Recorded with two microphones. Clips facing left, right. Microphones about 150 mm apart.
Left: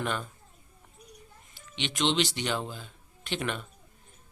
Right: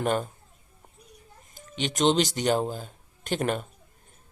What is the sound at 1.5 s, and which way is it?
A man's voice, 40° right (ahead or behind).